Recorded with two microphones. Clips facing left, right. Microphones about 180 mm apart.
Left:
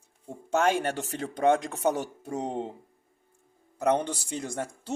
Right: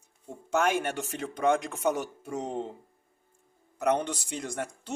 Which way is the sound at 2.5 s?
20° left (ahead or behind).